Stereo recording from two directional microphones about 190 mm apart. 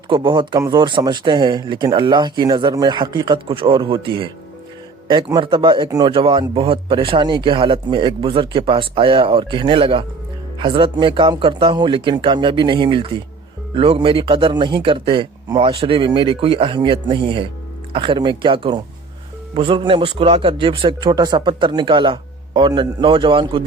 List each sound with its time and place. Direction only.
0.1 s speech: 25° right (ahead or behind)